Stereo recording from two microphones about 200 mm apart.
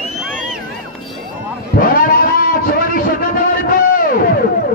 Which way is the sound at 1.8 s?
45° left (ahead or behind).